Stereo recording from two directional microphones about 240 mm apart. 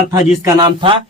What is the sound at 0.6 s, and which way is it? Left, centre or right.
Speech, centre.